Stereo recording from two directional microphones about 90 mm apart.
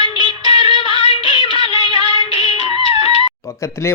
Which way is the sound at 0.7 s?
60° right (ahead or behind).